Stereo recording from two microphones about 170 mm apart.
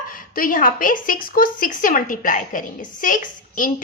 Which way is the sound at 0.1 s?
55° left (ahead or behind).